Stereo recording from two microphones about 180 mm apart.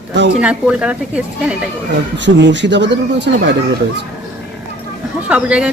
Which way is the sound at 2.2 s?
80° right.